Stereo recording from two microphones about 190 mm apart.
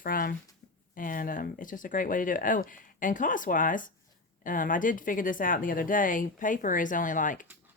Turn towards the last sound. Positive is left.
turn(degrees=45)  # may be behind; listen again after turning